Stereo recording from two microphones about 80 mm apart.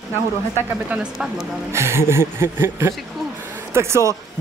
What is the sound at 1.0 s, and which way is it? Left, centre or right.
Speech, centre.